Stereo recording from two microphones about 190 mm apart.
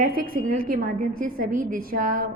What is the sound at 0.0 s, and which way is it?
A woman's voice, 45° right (ahead or behind).